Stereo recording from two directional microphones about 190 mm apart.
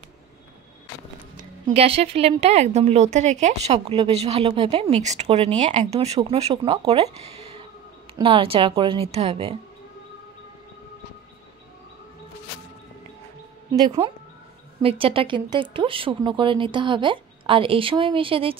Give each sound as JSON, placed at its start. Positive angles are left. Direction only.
{"t": 1.7, "sound": "a woman's voice", "side_deg": -30}
{"t": 8.2, "sound": "speech", "side_deg": -30}
{"t": 13.8, "sound": "speech", "side_deg": -30}